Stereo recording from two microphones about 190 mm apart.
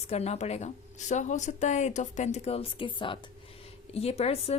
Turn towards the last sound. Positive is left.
turn(degrees=30)  # may be behind; listen again after turning